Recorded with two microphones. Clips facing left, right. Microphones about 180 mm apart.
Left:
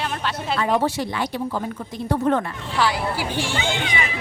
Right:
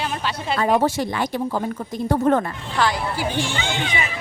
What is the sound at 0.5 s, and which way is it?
A woman's voice, 50° right (ahead or behind).